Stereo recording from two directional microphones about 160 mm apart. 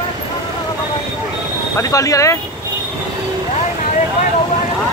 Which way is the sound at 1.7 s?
20° left (ahead or behind).